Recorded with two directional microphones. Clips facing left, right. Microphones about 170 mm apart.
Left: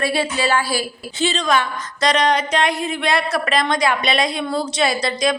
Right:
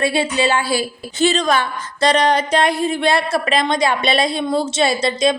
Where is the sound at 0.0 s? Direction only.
25° right (ahead or behind).